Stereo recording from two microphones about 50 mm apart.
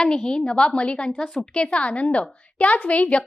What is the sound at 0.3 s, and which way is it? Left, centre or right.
A woman's voice, centre.